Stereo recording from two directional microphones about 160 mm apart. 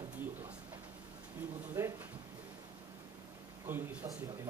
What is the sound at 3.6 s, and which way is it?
Speech, 15° right (ahead or behind).